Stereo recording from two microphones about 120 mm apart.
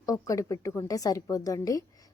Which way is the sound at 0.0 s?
30° left (ahead or behind).